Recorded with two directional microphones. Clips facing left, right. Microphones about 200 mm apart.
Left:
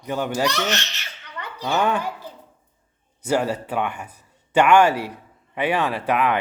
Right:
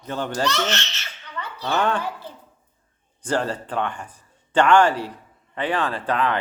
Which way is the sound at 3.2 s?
10° left (ahead or behind).